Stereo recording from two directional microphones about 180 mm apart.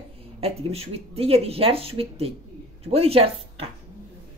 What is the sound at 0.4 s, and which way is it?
Speech, 35° right (ahead or behind).